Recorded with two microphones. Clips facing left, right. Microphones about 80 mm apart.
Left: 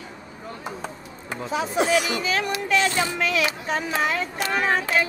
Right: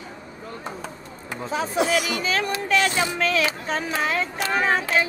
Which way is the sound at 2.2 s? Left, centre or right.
Right.